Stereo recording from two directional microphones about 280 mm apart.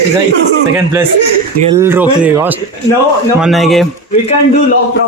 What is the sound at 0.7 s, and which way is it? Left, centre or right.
A man's voice, centre.